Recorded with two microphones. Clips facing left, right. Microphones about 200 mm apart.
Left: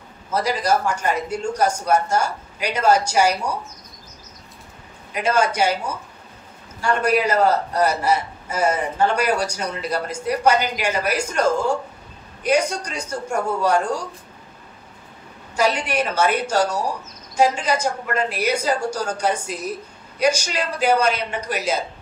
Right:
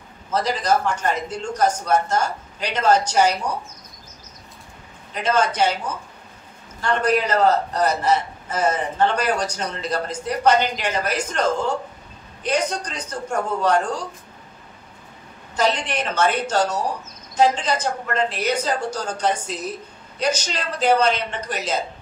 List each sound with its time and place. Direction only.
0.3 s a man's voice: 10° left (ahead or behind)
5.1 s a man's voice: 10° left (ahead or behind)
15.5 s a man's voice: 10° left (ahead or behind)